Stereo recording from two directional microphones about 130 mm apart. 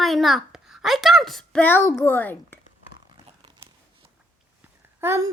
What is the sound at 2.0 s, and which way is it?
Speech, 15° left (ahead or behind).